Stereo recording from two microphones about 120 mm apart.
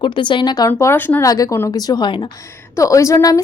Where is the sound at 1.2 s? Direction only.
30° left (ahead or behind).